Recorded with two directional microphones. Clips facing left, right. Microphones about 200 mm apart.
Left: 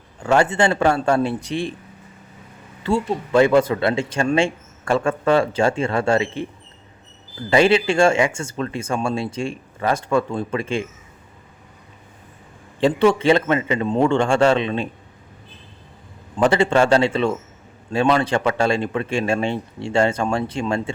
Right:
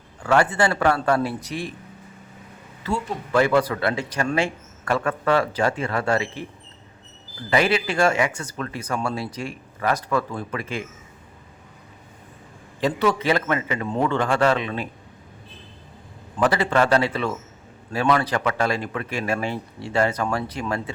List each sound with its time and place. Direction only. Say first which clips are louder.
0.2 s speech: left 2 dB; 25° left (ahead or behind)
2.8 s speech: left 6 dB; 30° left (ahead or behind)
7.5 s speech: left 5 dB; 25° left (ahead or behind)
12.8 s speech: left 5 dB; 30° left (ahead or behind)
16.4 s speech: left 4 dB; 25° left (ahead or behind)